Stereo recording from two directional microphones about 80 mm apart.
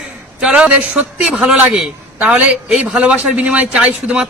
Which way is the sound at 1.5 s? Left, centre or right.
Centre.